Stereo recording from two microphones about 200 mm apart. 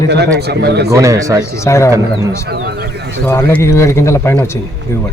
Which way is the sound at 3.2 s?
10° left (ahead or behind).